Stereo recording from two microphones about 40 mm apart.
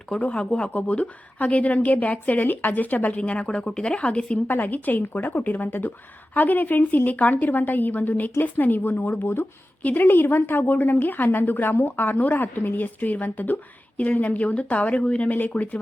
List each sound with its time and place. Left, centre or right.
0.2 s a woman's voice: left
3.2 s speech: left
4.4 s a woman's voice: left
9.2 s speech: left
9.8 s a woman's voice: left
15.3 s a woman's voice: left